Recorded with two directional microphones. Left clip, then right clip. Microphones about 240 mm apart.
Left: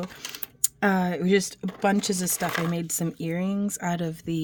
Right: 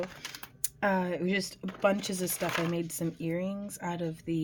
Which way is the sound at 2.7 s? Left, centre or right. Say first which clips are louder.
Left 3 dB; left.